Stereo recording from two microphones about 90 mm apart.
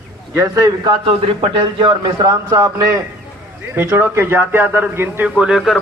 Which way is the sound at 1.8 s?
50° right (ahead or behind).